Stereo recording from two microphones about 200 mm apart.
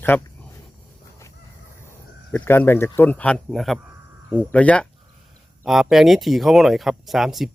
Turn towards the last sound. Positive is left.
turn(degrees=0)  # may be behind; listen again after turning